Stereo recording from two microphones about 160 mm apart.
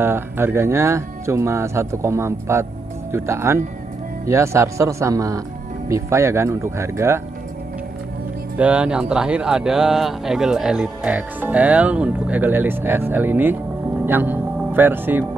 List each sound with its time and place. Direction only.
0.0 s speech: 15° right (ahead or behind)
8.5 s speech: 10° right (ahead or behind)